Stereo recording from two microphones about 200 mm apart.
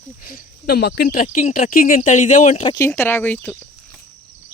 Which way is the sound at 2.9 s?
10° left (ahead or behind).